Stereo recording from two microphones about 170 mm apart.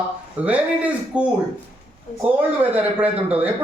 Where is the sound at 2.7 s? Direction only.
10° right (ahead or behind).